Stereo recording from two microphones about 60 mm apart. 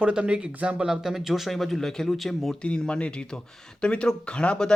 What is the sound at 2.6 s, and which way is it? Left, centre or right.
Speech, centre.